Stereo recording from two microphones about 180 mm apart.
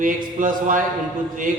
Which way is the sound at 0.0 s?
50° right (ahead or behind).